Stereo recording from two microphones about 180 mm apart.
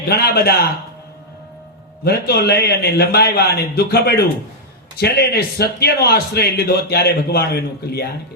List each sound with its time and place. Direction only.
0.1 s a man's voice: 60° left (ahead or behind)
2.0 s a man's voice: 60° left (ahead or behind)